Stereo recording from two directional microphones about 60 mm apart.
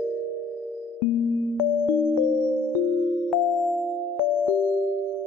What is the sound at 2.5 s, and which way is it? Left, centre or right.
Music, left.